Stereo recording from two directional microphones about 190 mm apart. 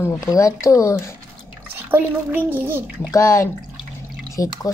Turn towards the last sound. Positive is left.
turn(degrees=15)  # may be behind; listen again after turning